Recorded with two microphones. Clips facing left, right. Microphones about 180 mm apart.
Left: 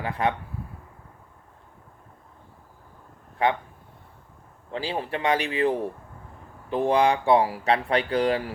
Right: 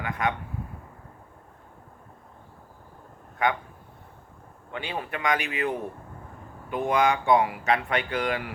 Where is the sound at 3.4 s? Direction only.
30° left (ahead or behind).